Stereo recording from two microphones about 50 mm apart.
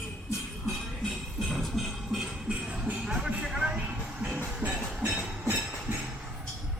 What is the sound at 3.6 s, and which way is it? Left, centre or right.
Music, right.